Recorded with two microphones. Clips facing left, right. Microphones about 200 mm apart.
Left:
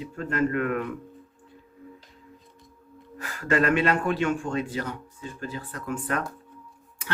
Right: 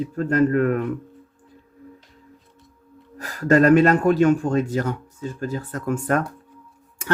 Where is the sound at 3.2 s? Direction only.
40° right (ahead or behind).